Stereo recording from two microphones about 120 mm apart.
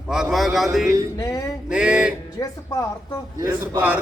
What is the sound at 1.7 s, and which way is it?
Music, 10° right (ahead or behind).